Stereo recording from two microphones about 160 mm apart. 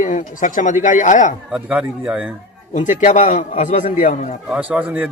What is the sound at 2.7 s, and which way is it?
Speech, 50° left (ahead or behind).